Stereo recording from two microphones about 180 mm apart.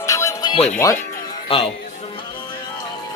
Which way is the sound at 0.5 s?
35° left (ahead or behind).